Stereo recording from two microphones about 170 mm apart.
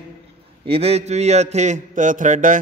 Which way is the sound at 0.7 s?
35° right (ahead or behind).